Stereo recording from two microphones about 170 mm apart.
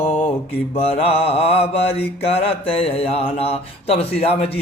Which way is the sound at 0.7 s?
35° left (ahead or behind).